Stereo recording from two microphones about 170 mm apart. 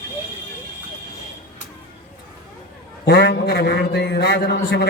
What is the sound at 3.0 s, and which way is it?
A man's voice, 80° left.